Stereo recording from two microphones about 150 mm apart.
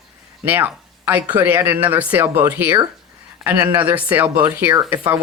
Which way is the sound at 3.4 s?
Centre (ahead or behind).